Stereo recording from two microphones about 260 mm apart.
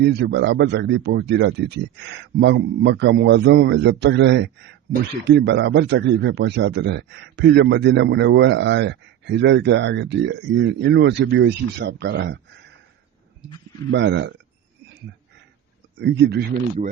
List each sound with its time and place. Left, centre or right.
0.0 s speech: right
13.9 s speech: right
16.0 s speech: right